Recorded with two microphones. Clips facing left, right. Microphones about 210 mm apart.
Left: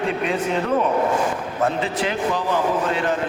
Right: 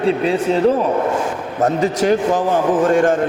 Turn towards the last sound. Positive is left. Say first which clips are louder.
# right 8 dB
turn(degrees=-45)  # may be behind; listen again after turning